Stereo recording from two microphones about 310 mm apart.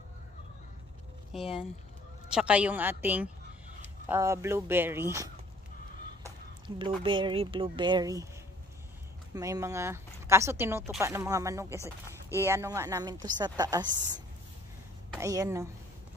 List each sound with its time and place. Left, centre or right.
2.2 s a woman's voice: centre
7.0 s speech: centre
9.3 s speech: centre